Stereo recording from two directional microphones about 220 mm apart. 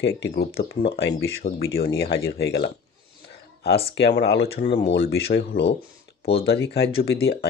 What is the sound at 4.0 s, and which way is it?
Speech, 50° left (ahead or behind).